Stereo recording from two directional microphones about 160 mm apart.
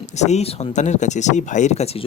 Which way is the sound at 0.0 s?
45° left (ahead or behind).